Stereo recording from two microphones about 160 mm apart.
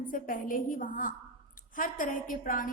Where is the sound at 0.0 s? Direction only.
60° left (ahead or behind).